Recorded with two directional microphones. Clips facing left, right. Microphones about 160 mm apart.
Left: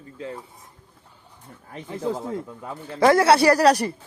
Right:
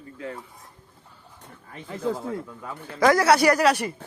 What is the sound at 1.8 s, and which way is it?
Speech, 20° left (ahead or behind).